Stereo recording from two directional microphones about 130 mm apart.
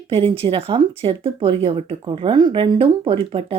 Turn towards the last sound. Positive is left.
turn(degrees=-45)  # may be behind; listen again after turning